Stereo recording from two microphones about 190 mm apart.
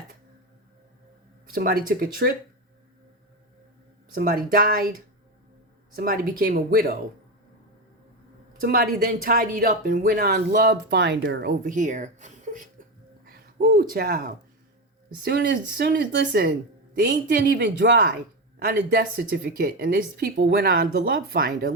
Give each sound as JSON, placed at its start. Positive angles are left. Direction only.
{"t": 1.5, "sound": "speech", "side_deg": -50}
{"t": 4.1, "sound": "speech", "side_deg": -50}
{"t": 6.0, "sound": "speech", "side_deg": -50}
{"t": 8.5, "sound": "speech", "side_deg": -50}
{"t": 10.8, "sound": "speech", "side_deg": -65}
{"t": 13.2, "sound": "a woman's voice", "side_deg": -50}